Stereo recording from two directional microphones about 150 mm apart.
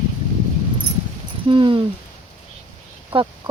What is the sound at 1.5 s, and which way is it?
Speech, 35° right (ahead or behind).